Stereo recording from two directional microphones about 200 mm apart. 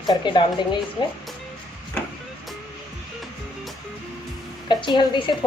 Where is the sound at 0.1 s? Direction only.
20° left (ahead or behind).